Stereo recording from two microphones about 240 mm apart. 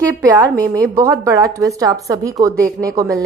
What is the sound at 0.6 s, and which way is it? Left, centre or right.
A woman's voice, centre.